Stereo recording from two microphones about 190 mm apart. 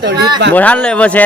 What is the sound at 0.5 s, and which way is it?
Speech, 5° left (ahead or behind).